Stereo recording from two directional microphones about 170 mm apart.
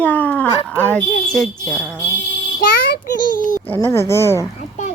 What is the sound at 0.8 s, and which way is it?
A child's voice, 10° left (ahead or behind).